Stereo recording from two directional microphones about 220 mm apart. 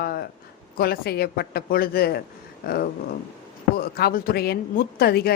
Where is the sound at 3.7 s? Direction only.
45° left (ahead or behind).